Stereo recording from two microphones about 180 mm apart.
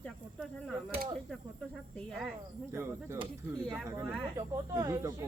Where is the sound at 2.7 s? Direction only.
15° right (ahead or behind).